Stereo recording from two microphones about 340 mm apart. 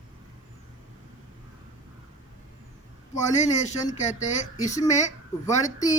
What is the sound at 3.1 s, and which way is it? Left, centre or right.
Speech, centre.